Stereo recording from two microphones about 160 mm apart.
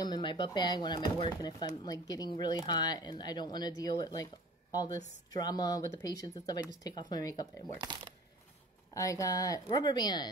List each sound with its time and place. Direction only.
0.0 s speech: 30° left (ahead or behind)
8.9 s speech: 20° left (ahead or behind)